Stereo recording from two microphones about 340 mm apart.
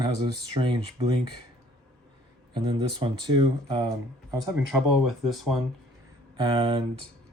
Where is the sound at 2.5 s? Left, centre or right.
Centre.